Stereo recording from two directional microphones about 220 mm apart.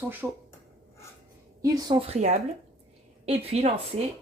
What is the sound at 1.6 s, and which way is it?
Speech, 15° right (ahead or behind).